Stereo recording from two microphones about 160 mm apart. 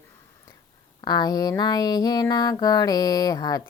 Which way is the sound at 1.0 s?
25° left (ahead or behind).